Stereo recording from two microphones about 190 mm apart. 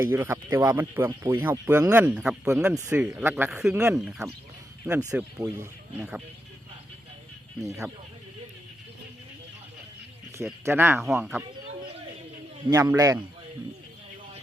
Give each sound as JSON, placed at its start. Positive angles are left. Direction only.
{"t": 0.0, "sound": "speech", "side_deg": -10}
{"t": 4.9, "sound": "speech", "side_deg": -15}
{"t": 5.4, "sound": "speech", "side_deg": -5}
{"t": 10.7, "sound": "speech", "side_deg": -10}
{"t": 11.2, "sound": "speech", "side_deg": 0}
{"t": 12.7, "sound": "speech", "side_deg": -15}